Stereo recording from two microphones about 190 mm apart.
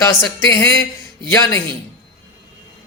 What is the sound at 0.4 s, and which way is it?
A man's voice, 15° left (ahead or behind).